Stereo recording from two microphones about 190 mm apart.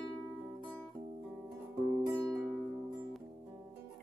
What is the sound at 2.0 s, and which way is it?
Music, 20° right (ahead or behind).